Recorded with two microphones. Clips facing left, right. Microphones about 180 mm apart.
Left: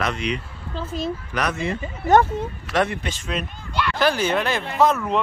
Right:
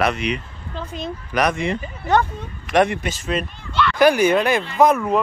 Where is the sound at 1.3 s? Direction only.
15° right (ahead or behind).